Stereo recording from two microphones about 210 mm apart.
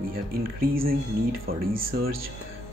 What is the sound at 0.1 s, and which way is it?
Speech, 45° right (ahead or behind).